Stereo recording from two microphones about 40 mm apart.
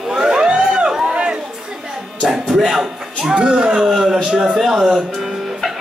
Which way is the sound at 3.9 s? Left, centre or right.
Centre.